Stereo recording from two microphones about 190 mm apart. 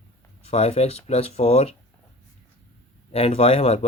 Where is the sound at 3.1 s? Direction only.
30° left (ahead or behind).